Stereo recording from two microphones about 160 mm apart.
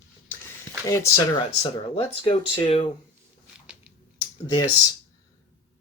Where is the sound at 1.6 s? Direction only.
35° left (ahead or behind).